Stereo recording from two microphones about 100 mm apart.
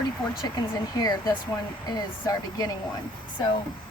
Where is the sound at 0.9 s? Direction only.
45° left (ahead or behind).